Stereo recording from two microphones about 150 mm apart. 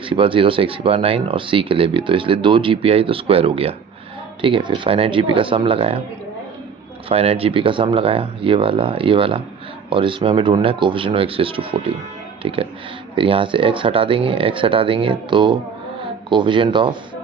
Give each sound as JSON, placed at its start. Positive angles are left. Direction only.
{"t": 0.0, "sound": "speech", "side_deg": -35}
{"t": 7.1, "sound": "speech", "side_deg": -40}